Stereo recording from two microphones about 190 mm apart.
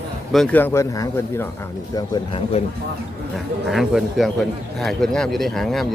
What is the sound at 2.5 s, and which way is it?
Speech, 30° left (ahead or behind).